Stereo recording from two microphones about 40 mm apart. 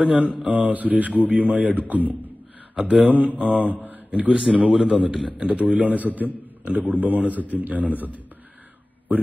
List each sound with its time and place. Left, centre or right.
0.0 s a man's voice: right
2.8 s speech: right
3.4 s a man's voice: right
3.8 s a sound: right
4.3 s a man's voice: right